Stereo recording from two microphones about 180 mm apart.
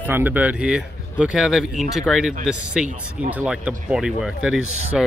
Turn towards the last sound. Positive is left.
turn(degrees=0)  # may be behind; listen again after turning